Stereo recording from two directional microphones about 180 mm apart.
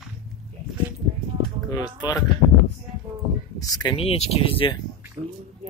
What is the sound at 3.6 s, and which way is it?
Speech, 30° left (ahead or behind).